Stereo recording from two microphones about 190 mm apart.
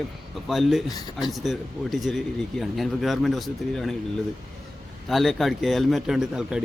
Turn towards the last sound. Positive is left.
turn(degrees=-5)  # may be behind; listen again after turning